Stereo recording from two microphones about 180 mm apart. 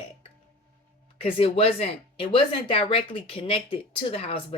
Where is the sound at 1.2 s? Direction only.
30° left (ahead or behind).